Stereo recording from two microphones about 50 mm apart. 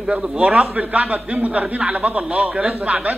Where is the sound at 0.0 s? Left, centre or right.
Centre.